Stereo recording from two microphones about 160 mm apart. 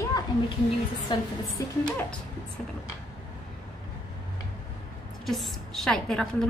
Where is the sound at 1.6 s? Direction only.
20° left (ahead or behind).